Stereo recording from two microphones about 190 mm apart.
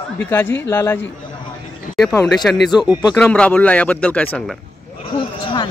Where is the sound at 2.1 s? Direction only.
5° left (ahead or behind).